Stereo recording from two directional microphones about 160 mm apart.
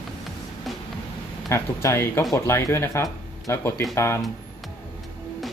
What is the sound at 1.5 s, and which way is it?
Speech, 15° left (ahead or behind).